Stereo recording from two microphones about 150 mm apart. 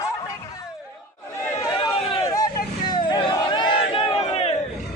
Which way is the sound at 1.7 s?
35° left (ahead or behind).